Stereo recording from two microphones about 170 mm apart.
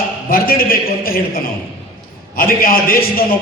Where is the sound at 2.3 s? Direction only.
55° left (ahead or behind).